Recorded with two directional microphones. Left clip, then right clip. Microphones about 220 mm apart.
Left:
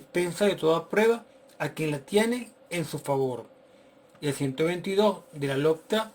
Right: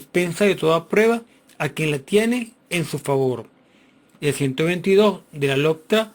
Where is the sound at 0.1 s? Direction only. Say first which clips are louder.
Right 6 dB; 25° right (ahead or behind).